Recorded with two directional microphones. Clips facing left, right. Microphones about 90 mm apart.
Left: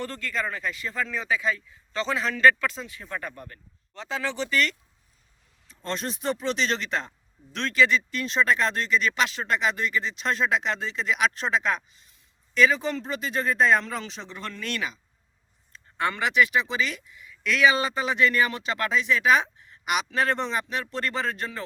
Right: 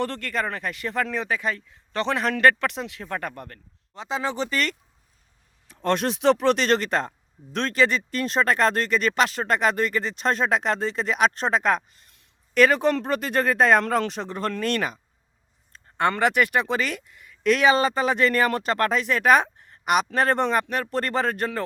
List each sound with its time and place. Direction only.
0.0 s speech: 60° right (ahead or behind)
4.1 s speech: 30° right (ahead or behind)
5.6 s speech: 60° right (ahead or behind)